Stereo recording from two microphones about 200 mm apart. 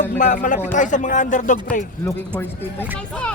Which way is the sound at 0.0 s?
40° left (ahead or behind).